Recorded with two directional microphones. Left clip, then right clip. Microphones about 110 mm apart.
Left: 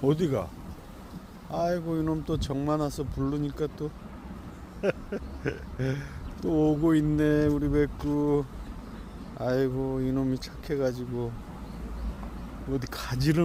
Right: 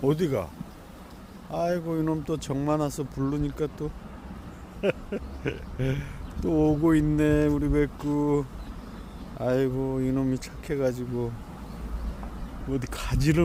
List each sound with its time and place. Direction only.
0.0 s speech: 40° right (ahead or behind)
1.5 s speech: 30° right (ahead or behind)
12.7 s speech: 25° right (ahead or behind)